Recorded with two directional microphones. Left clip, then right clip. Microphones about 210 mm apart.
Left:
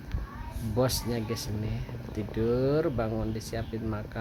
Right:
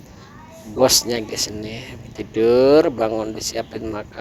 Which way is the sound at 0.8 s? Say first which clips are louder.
Right 13 dB; 40° right (ahead or behind).